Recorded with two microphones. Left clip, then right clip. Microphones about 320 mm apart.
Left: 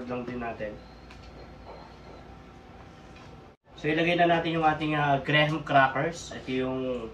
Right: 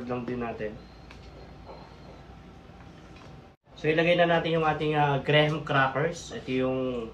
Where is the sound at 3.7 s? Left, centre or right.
Centre.